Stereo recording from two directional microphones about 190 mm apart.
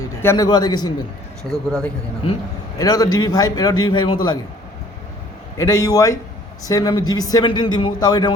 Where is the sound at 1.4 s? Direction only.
5° left (ahead or behind).